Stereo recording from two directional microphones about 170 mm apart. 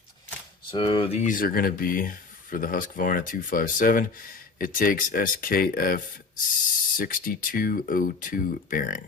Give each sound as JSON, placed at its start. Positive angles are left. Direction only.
{"t": 0.7, "sound": "speech", "side_deg": 30}